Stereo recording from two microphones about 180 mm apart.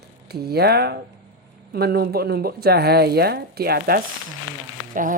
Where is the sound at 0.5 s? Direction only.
60° right (ahead or behind).